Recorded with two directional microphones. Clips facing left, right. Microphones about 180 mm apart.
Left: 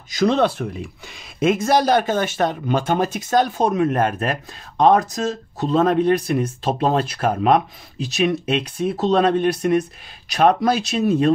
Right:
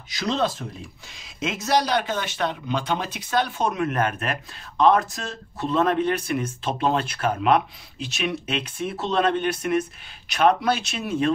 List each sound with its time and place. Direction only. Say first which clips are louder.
0.1 s speech: left 7 dB; 55° left (ahead or behind)